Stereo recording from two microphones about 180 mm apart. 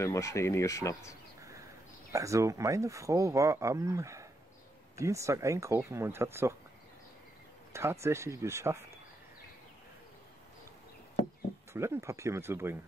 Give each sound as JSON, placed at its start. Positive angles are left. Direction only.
{"t": 0.0, "sound": "speech", "side_deg": 15}
{"t": 2.1, "sound": "speech", "side_deg": -15}
{"t": 7.7, "sound": "speech", "side_deg": -15}
{"t": 11.7, "sound": "speech", "side_deg": -15}